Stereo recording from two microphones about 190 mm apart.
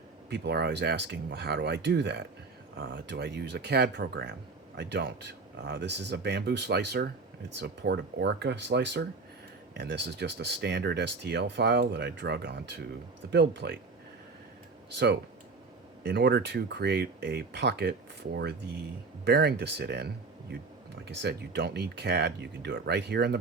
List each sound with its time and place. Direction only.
0.3 s speech: 60° right (ahead or behind)
14.9 s speech: 65° right (ahead or behind)
19.2 s speech: 60° right (ahead or behind)